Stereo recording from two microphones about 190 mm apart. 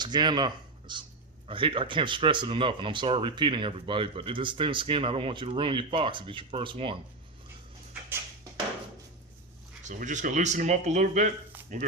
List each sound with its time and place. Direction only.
0.0 s speech: 20° right (ahead or behind)
9.8 s speech: 40° right (ahead or behind)